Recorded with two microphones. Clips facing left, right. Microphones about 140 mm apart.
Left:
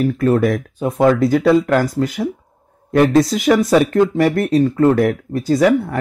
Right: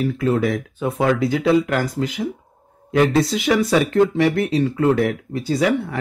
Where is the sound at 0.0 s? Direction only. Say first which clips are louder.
Left 4 dB; 50° left (ahead or behind).